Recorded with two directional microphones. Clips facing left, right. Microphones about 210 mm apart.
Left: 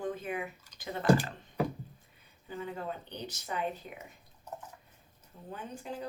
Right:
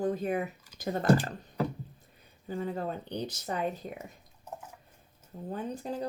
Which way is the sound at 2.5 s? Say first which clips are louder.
Right 5 dB; 35° right (ahead or behind).